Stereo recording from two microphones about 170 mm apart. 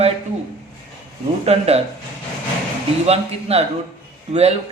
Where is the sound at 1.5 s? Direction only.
35° right (ahead or behind).